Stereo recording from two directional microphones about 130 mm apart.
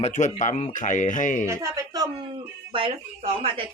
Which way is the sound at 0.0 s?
70° left (ahead or behind).